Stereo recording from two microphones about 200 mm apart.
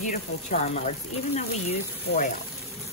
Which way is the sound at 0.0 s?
35° left (ahead or behind).